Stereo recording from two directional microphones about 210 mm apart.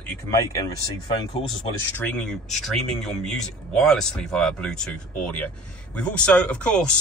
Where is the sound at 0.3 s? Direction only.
15° left (ahead or behind).